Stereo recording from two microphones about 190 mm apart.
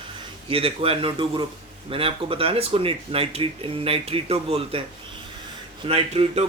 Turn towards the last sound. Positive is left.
turn(degrees=-30)  # may be behind; listen again after turning